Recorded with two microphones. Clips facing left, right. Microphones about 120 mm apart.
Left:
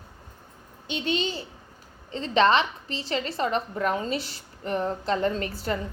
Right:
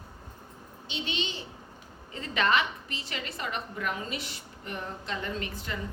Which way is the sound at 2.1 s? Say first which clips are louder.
Left 7 dB; 30° left (ahead or behind).